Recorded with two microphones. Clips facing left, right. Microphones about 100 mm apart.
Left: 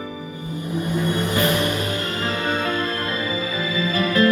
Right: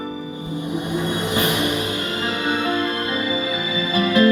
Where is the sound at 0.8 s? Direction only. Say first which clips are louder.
Left 3 dB; 20° right (ahead or behind).